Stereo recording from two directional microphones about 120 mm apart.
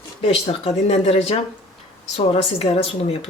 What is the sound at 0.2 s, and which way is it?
Speech, 55° left (ahead or behind).